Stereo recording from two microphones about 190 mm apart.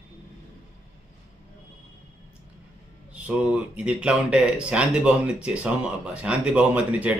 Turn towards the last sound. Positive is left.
turn(degrees=-10)  # may be behind; listen again after turning